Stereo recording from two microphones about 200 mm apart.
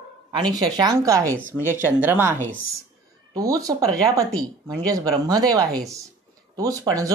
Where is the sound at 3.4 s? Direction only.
15° right (ahead or behind).